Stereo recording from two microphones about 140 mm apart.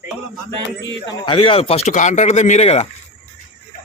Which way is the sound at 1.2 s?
40° left (ahead or behind).